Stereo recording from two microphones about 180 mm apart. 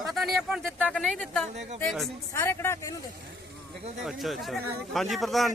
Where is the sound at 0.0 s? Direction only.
Centre (ahead or behind).